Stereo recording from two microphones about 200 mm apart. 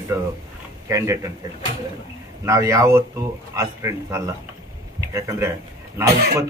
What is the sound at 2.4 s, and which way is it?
A man's voice, 15° right (ahead or behind).